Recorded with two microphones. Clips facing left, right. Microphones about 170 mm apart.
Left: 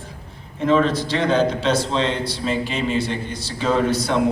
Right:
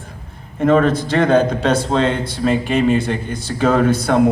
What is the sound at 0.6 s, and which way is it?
A man's voice, 50° right (ahead or behind).